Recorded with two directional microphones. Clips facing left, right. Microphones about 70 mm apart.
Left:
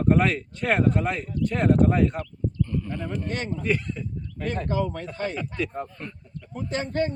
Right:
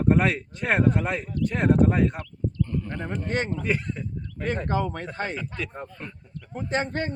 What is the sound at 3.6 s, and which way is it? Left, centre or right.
Speech, centre.